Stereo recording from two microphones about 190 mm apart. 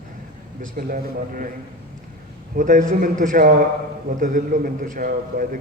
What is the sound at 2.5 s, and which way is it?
A man's voice, 45° right (ahead or behind).